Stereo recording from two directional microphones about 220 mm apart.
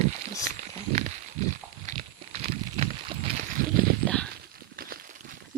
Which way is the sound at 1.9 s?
30° right (ahead or behind).